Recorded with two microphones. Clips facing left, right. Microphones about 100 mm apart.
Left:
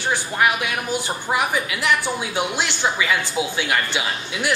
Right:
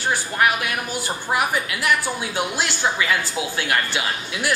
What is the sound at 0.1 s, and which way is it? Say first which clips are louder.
A woman's voice: left 1 dB; 20° left (ahead or behind).